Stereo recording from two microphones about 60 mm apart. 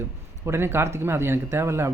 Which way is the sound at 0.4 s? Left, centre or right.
Right.